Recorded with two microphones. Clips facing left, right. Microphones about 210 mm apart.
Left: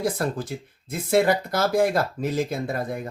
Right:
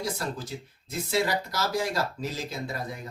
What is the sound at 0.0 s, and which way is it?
Speech, 55° left (ahead or behind).